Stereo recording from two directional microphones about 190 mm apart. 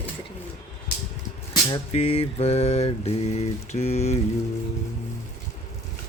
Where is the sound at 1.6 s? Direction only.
30° left (ahead or behind).